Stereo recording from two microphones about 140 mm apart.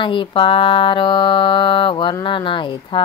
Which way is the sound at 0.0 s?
35° left (ahead or behind).